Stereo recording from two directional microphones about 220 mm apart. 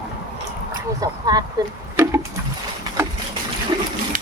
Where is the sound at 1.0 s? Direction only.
15° right (ahead or behind).